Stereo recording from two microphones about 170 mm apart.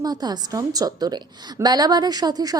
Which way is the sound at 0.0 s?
25° right (ahead or behind).